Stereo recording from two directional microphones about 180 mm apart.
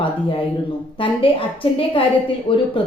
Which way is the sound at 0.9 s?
30° left (ahead or behind).